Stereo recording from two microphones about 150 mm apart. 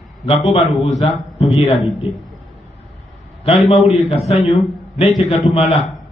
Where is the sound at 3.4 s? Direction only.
40° left (ahead or behind).